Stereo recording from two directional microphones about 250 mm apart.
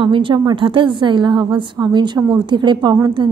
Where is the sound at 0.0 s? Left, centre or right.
Centre.